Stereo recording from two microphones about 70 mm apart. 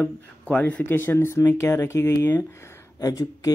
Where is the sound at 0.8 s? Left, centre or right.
Left.